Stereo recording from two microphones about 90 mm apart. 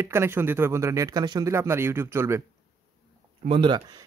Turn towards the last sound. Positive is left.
turn(degrees=-65)  # may be behind; listen again after turning